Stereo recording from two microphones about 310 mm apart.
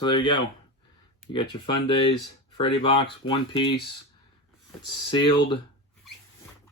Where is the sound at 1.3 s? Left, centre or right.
Centre.